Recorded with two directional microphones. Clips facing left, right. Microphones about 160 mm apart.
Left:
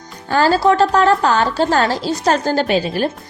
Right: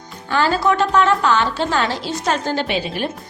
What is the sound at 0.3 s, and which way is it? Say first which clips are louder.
A woman's voice: left 4 dB; 40° left (ahead or behind).